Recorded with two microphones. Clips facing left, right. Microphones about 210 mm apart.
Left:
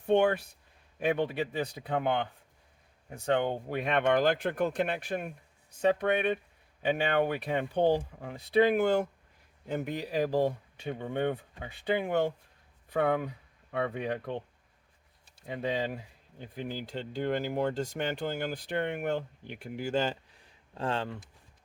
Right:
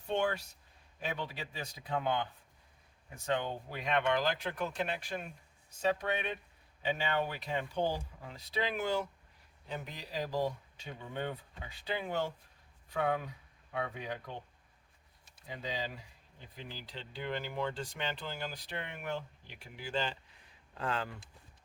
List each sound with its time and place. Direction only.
0.0 s speech: 55° left (ahead or behind)
3.2 s speech: 60° left (ahead or behind)
15.4 s speech: 60° left (ahead or behind); by 20.1 s 45° left (ahead or behind)
20.7 s speech: 30° left (ahead or behind)